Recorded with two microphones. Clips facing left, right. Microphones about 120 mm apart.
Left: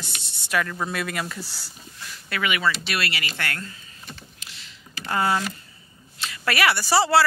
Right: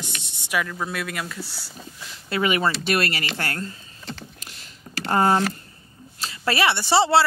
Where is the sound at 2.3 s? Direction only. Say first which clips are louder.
Right 3 dB; 35° right (ahead or behind).